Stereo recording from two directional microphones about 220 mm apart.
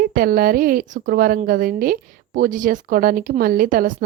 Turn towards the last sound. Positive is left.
turn(degrees=-40)  # may be behind; listen again after turning